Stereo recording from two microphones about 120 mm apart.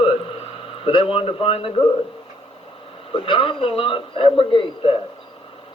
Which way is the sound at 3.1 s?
45° left (ahead or behind).